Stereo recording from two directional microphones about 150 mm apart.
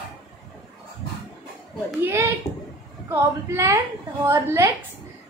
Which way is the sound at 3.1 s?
20° right (ahead or behind).